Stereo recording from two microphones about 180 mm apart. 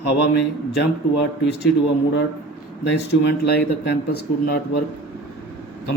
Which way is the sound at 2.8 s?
70° left (ahead or behind).